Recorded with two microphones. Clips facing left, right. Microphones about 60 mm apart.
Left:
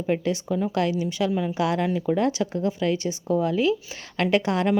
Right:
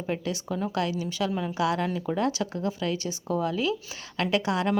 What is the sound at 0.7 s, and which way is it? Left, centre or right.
Speech, left.